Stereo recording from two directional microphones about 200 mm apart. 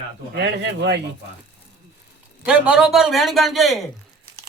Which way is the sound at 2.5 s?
5° right (ahead or behind).